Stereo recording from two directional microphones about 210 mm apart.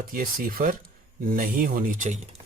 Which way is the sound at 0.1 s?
45° right (ahead or behind).